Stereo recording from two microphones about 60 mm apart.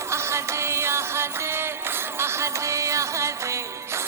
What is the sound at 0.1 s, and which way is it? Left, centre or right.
Music, right.